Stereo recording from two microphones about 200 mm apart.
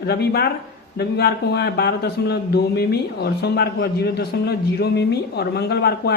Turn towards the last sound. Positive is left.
turn(degrees=55)  # may be behind; listen again after turning